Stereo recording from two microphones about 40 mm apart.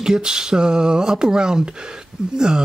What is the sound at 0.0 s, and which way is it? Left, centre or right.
Speech, centre.